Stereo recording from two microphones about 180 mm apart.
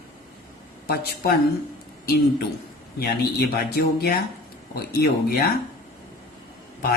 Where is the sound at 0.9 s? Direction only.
60° left (ahead or behind).